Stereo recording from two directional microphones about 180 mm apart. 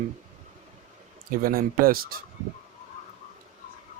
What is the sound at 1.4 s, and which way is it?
Speech, 55° right (ahead or behind).